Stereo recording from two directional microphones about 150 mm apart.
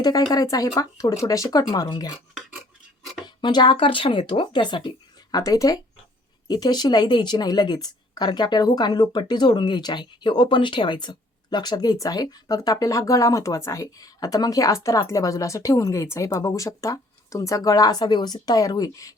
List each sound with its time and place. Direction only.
0.0 s a woman's voice: 25° left (ahead or behind)
3.2 s a woman's voice: 30° left (ahead or behind)